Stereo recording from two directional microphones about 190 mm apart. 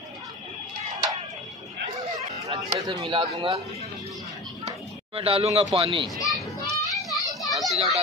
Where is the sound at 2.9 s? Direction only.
25° right (ahead or behind).